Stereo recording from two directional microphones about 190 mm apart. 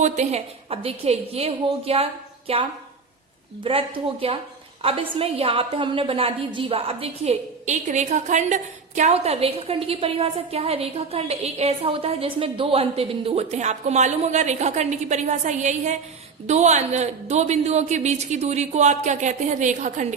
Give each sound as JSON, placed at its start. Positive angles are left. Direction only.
{"t": 0.0, "sound": "a woman's voice", "side_deg": -35}